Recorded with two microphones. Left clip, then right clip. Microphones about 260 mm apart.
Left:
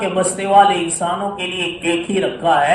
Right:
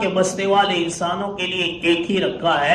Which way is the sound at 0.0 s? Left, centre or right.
Left.